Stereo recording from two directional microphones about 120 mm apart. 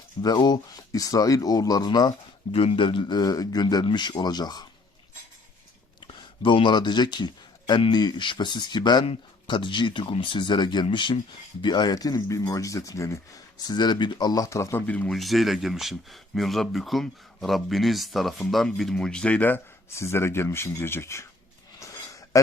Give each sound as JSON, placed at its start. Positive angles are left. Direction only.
{"t": 0.2, "sound": "speech", "side_deg": 35}
{"t": 2.5, "sound": "speech", "side_deg": 50}
{"t": 6.1, "sound": "speech", "side_deg": 45}
{"t": 15.1, "sound": "speech", "side_deg": 0}
{"t": 21.8, "sound": "a sound", "side_deg": 25}